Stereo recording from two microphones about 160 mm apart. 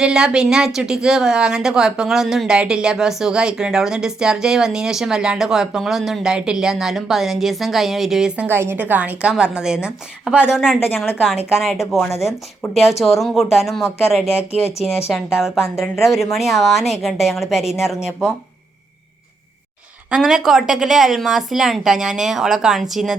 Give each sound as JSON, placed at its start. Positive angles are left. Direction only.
{"t": 0.0, "sound": "speech", "side_deg": -5}
{"t": 10.8, "sound": "speech", "side_deg": 15}
{"t": 11.5, "sound": "speech", "side_deg": 0}
{"t": 11.9, "sound": "speech", "side_deg": 15}
{"t": 12.2, "sound": "speech", "side_deg": 0}
{"t": 14.3, "sound": "speech", "side_deg": 15}
{"t": 15.1, "sound": "speech", "side_deg": 0}
{"t": 20.1, "sound": "speech", "side_deg": -5}